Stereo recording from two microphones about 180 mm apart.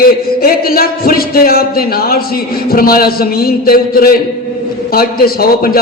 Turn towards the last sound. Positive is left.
turn(degrees=55)  # may be behind; listen again after turning